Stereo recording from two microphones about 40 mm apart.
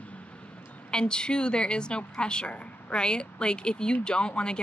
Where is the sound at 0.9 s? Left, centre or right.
Left.